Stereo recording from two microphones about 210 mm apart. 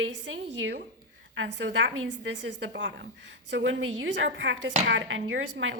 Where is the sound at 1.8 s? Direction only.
60° right (ahead or behind).